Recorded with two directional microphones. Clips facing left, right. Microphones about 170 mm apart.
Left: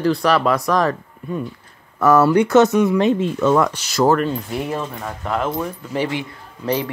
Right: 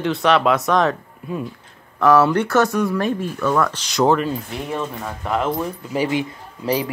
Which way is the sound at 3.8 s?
Centre (ahead or behind).